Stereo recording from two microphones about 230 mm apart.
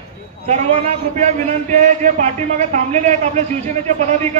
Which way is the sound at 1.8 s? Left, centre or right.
Right.